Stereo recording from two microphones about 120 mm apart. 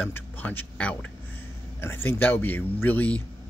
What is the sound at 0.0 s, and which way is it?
Speech, 15° left (ahead or behind).